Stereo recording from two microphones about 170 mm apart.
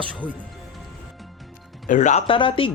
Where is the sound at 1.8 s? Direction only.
45° left (ahead or behind).